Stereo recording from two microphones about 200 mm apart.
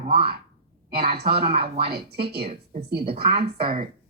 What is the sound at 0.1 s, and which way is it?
A woman's voice, 50° right (ahead or behind).